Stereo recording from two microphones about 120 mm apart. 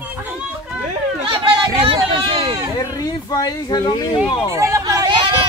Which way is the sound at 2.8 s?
30° left (ahead or behind).